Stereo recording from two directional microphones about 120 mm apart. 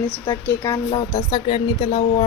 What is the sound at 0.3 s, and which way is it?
Speech, 20° left (ahead or behind).